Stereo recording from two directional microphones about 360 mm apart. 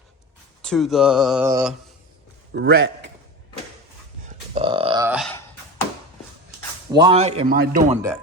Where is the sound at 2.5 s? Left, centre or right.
Right.